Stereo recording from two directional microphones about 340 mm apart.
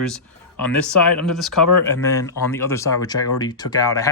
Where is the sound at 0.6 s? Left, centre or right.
Centre.